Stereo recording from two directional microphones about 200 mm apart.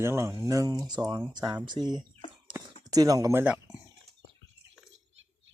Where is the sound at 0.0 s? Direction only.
15° right (ahead or behind).